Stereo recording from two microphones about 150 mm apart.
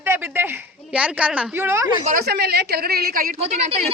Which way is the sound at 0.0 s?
15° right (ahead or behind).